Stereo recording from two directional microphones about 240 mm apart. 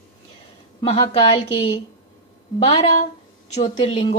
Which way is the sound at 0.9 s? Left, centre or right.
Centre.